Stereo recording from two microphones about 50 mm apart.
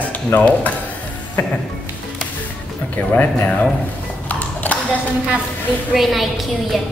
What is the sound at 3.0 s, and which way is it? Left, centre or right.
Speech, left.